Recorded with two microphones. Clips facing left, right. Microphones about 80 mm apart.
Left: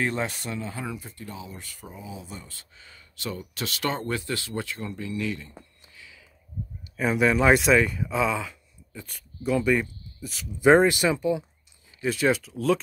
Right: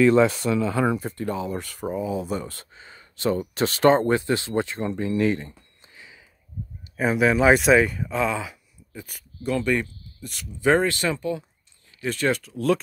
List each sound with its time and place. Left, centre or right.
0.6 s speech: right
0.8 s speech: right
2.7 s speech: right
5.9 s a sound: right
7.0 s speech: centre
10.6 s speech: centre